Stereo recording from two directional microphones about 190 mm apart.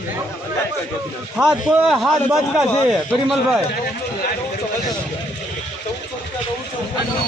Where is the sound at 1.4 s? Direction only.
Centre (ahead or behind).